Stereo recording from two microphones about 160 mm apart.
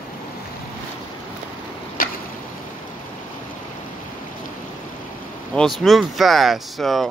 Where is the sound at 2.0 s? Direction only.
65° left (ahead or behind).